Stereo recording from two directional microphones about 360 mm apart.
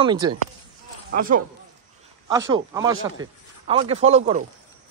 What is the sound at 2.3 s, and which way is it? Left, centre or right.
Speech, centre.